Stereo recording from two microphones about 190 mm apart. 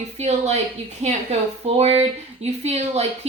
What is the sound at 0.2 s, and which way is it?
Speech, 35° right (ahead or behind).